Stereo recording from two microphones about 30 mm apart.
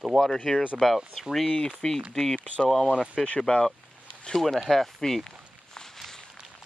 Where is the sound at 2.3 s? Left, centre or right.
Left.